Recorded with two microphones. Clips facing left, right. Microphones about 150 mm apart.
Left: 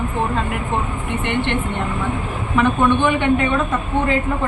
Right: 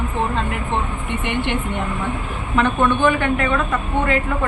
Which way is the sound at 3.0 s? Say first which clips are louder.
Left 1 dB; 20° left (ahead or behind).